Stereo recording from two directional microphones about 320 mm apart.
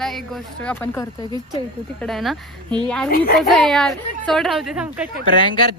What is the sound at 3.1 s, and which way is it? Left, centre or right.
Speech, left.